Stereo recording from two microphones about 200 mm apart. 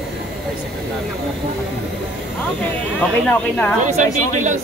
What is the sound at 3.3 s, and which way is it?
Speech, 5° left (ahead or behind).